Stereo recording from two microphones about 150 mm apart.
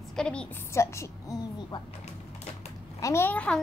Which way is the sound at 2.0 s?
45° left (ahead or behind).